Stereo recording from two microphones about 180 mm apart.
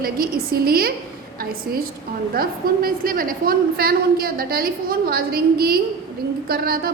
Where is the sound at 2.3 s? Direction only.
55° right (ahead or behind).